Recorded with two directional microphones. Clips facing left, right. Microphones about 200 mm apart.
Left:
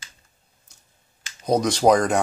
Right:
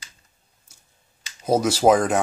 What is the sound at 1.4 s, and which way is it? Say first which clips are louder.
Speech: right 1 dB; 5° right (ahead or behind).